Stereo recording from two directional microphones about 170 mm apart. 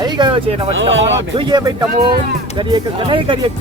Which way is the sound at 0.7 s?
90° right.